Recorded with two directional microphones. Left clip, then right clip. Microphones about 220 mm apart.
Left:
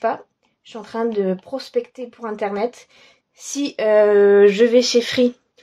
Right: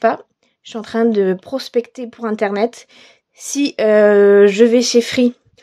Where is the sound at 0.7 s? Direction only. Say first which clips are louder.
Right 6 dB; 40° right (ahead or behind).